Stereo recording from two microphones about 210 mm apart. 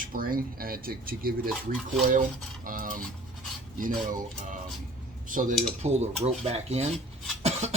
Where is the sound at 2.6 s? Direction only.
40° right (ahead or behind).